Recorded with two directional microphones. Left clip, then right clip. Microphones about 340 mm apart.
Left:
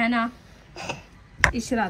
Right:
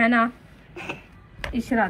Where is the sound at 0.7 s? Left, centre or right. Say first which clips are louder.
Left 1 dB; left.